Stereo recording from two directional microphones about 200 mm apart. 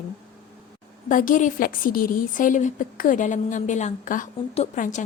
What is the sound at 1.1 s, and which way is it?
A woman's voice, 40° left (ahead or behind).